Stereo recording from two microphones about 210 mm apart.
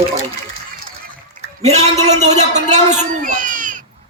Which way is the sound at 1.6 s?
30° right (ahead or behind).